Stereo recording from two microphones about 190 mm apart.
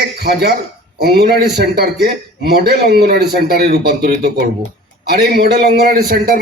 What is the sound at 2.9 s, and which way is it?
A man's voice, 55° right (ahead or behind).